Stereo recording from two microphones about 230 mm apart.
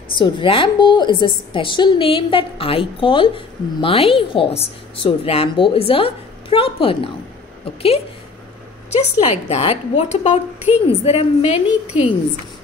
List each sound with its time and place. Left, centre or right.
0.1 s a woman's voice: left